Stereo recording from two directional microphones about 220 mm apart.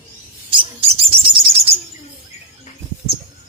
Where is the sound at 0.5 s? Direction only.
25° right (ahead or behind).